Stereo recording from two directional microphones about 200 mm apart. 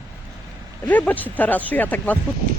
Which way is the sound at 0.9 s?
10° left (ahead or behind).